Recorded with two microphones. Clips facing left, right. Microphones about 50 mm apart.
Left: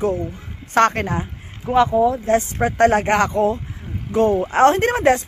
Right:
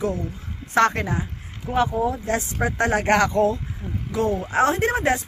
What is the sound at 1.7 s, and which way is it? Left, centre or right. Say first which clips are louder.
Speech: left 6 dB; left.